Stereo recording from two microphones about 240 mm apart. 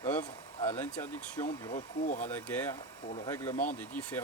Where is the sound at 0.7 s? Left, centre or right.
Centre.